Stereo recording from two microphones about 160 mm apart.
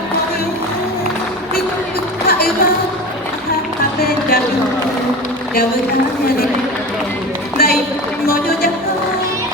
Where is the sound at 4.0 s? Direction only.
75° left (ahead or behind).